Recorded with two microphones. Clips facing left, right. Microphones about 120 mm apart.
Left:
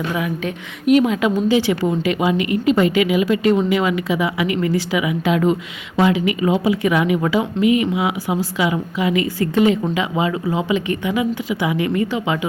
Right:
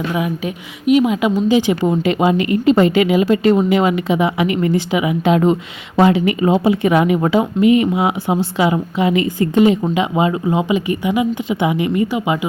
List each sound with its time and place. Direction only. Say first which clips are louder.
0.1 s a woman's voice: right 2 dB; 15° right (ahead or behind)
6.0 s speech: right 3 dB; 35° right (ahead or behind); by 12.5 s 15° right (ahead or behind)